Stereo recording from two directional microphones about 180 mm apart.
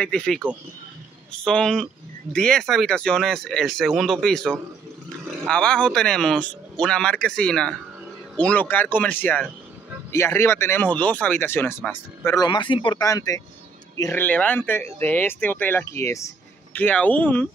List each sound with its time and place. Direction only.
0.0 s speech: 5° left (ahead or behind)
12.3 s a man's voice: 25° left (ahead or behind)